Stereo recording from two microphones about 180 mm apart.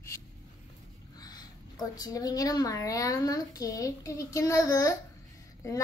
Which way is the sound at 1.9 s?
20° left (ahead or behind).